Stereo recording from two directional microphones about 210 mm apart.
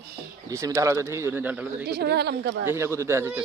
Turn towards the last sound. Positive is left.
turn(degrees=-15)  # may be behind; listen again after turning